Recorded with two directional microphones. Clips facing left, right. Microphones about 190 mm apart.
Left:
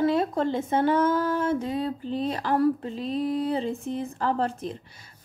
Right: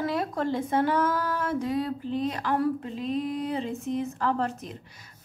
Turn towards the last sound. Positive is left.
turn(degrees=30)  # may be behind; listen again after turning